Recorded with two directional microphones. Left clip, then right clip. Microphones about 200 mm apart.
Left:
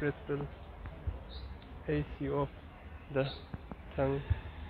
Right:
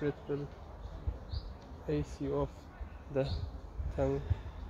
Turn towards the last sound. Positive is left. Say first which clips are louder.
# even
turn(degrees=-5)  # may be behind; listen again after turning